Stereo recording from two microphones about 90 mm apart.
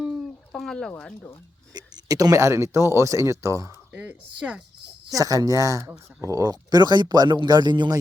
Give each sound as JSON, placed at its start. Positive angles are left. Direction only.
{"t": 0.5, "sound": "speech", "side_deg": 5}
{"t": 1.7, "sound": "speech", "side_deg": -45}
{"t": 3.9, "sound": "speech", "side_deg": -15}
{"t": 5.1, "sound": "speech", "side_deg": -40}